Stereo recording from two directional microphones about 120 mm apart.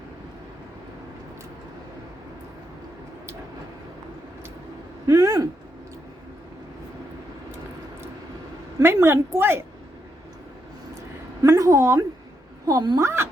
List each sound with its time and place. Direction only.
5.0 s a sound: 30° right (ahead or behind)
8.8 s a woman's voice: 20° right (ahead or behind)
11.4 s a woman's voice: 25° right (ahead or behind)